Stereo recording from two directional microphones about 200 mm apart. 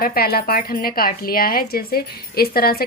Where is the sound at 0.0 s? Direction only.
50° left (ahead or behind).